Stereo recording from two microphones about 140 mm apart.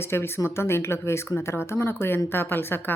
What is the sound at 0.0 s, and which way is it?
Speech, 15° left (ahead or behind).